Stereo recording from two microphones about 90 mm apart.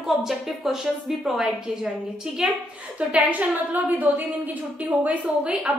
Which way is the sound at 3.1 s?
20° right (ahead or behind).